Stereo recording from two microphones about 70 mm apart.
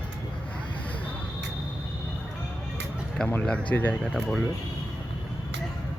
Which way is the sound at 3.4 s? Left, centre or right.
Centre.